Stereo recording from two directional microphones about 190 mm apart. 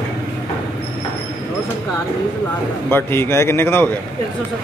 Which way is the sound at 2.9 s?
10° left (ahead or behind).